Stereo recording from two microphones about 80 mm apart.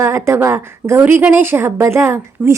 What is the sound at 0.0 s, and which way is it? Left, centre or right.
Speech, right.